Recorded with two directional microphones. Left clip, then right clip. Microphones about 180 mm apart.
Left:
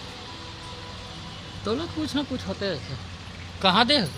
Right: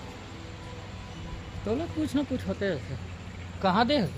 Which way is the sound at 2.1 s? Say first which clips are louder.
Left 1 dB; 15° right (ahead or behind).